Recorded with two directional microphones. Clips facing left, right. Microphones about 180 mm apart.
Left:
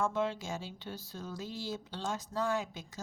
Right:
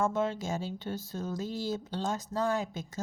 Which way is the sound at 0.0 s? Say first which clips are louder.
Right 3 dB; 45° right (ahead or behind).